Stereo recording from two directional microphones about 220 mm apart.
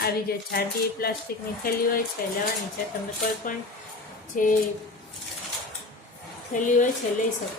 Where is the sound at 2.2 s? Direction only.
40° left (ahead or behind).